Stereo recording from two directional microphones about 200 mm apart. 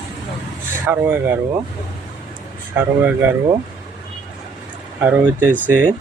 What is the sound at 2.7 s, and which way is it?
Speech, 10° right (ahead or behind).